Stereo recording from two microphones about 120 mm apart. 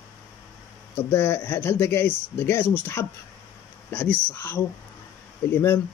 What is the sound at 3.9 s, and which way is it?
Speech, 20° left (ahead or behind).